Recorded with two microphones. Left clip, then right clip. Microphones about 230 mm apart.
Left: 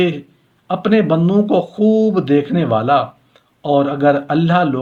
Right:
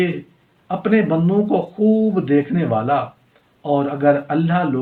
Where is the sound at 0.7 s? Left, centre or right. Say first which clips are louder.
Left 3 dB; left.